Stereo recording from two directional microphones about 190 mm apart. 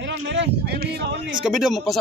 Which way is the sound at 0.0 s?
65° right (ahead or behind).